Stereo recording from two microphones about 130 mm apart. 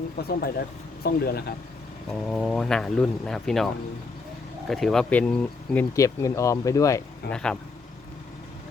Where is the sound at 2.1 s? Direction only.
5° left (ahead or behind).